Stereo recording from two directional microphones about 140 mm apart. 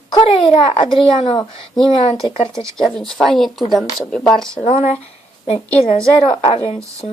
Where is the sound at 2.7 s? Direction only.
5° left (ahead or behind).